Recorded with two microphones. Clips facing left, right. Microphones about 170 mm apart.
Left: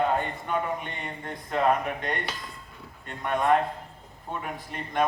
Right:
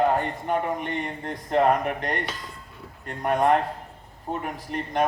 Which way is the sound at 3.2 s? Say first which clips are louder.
Right 2 dB; 40° right (ahead or behind).